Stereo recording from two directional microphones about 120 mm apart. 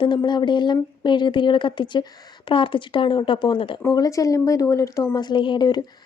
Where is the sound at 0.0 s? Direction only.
40° left (ahead or behind).